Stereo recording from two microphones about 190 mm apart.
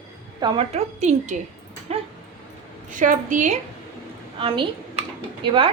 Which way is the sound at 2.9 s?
45° right (ahead or behind).